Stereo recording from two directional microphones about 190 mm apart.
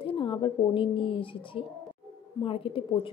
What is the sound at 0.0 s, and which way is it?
A woman's voice, 25° left (ahead or behind).